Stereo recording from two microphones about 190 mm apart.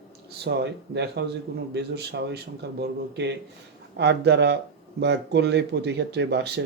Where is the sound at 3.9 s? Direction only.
60° right (ahead or behind).